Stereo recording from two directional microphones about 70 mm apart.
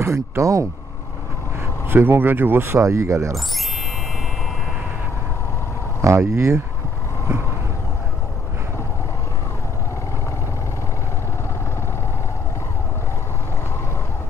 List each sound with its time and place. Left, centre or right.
0.0 s speech: right
1.9 s speech: right
6.0 s speech: right